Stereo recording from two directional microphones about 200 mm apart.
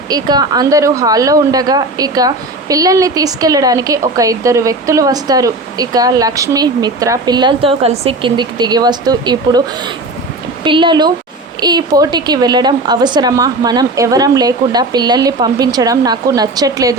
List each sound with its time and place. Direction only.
0.1 s a woman's voice: 20° right (ahead or behind)